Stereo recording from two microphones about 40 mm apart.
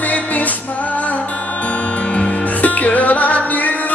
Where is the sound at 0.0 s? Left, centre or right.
Left.